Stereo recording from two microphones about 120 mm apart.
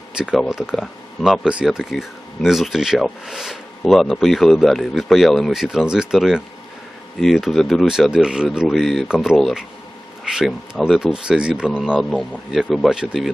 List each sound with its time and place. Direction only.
0.2 s speech: 5° right (ahead or behind)